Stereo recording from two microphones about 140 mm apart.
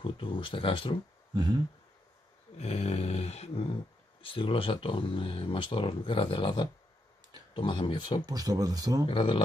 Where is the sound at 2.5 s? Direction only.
45° left (ahead or behind).